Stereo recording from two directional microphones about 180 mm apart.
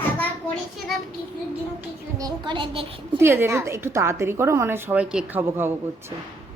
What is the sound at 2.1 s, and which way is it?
A woman's voice, 25° right (ahead or behind).